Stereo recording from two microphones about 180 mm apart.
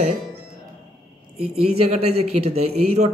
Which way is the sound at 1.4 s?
35° right (ahead or behind).